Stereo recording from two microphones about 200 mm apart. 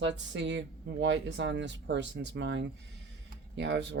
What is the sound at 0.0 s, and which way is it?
Speech, 65° right (ahead or behind).